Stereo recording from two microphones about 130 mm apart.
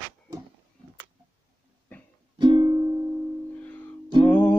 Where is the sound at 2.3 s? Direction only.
35° right (ahead or behind).